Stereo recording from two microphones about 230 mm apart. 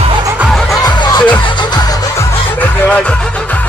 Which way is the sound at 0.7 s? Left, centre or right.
Centre.